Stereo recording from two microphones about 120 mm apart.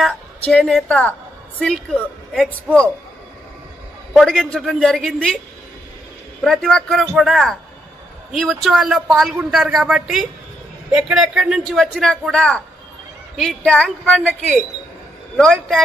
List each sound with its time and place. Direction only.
0.4 s a man's voice: 5° left (ahead or behind)
4.1 s a man's voice: centre (ahead or behind)
6.4 s a man's voice: centre (ahead or behind)